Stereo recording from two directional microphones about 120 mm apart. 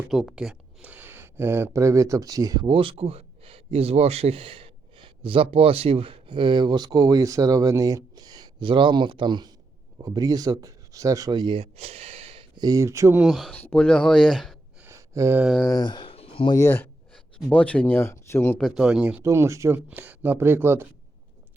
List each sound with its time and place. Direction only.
0.1 s speech: centre (ahead or behind); by 2.6 s 30° right (ahead or behind)
2.6 s speech: 50° right (ahead or behind)
12.5 s speech: 30° right (ahead or behind)
13.2 s speech: centre (ahead or behind)
13.5 s speech: 15° left (ahead or behind)
14.8 s a sound: 25° right (ahead or behind)
15.6 s speech: 35° left (ahead or behind)
16.6 s speech: 20° left (ahead or behind)
18.6 s speech: 5° right (ahead or behind)
19.2 s speech: 25° right (ahead or behind)